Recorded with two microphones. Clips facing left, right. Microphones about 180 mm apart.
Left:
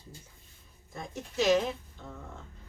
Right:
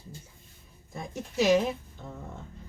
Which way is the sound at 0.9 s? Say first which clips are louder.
Right 3 dB; 10° right (ahead or behind).